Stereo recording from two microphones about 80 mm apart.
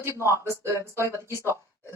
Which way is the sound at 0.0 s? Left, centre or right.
Right.